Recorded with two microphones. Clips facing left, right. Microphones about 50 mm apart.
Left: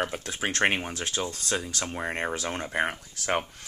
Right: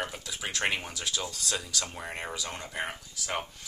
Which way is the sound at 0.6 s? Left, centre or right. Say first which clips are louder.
Left 5 dB; left.